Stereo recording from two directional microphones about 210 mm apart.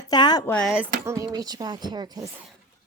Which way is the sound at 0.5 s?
Centre (ahead or behind).